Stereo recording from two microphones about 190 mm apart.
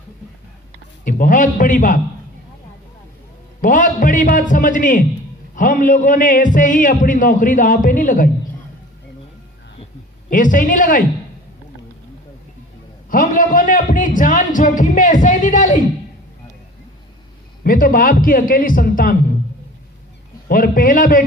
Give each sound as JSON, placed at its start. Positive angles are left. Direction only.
{"t": 1.0, "sound": "a man's voice", "side_deg": 45}
{"t": 3.6, "sound": "a man's voice", "side_deg": 45}
{"t": 10.2, "sound": "a man's voice", "side_deg": 45}
{"t": 13.1, "sound": "a man's voice", "side_deg": 45}
{"t": 17.6, "sound": "a man's voice", "side_deg": 50}
{"t": 20.5, "sound": "a man's voice", "side_deg": 45}